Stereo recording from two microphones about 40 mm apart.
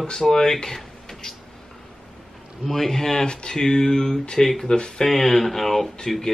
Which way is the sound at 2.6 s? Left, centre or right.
Centre.